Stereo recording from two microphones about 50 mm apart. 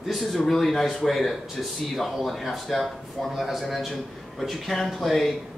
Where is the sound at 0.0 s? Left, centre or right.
Centre.